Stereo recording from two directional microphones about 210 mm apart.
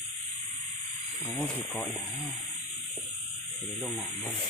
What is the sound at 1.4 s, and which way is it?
Speech, 5° left (ahead or behind).